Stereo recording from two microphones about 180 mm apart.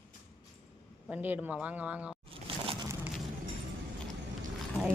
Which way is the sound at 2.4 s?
30° right (ahead or behind).